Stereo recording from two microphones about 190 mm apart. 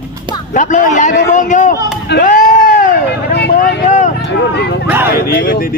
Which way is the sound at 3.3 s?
60° left (ahead or behind).